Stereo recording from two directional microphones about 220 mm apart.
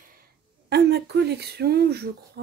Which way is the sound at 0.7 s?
50° right (ahead or behind).